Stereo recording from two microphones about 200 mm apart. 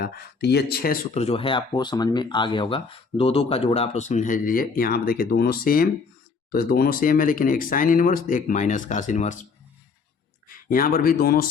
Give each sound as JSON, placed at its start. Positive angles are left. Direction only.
{"t": 0.0, "sound": "speech", "side_deg": 55}
{"t": 1.1, "sound": "speech", "side_deg": 30}
{"t": 10.5, "sound": "speech", "side_deg": 45}